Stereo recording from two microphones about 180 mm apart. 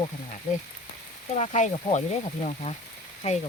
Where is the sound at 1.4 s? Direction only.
40° left (ahead or behind).